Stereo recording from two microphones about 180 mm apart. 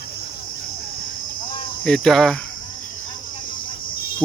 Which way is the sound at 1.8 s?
Centre (ahead or behind).